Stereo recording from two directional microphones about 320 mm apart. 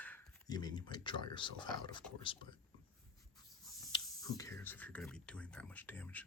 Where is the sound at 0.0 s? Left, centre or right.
Centre.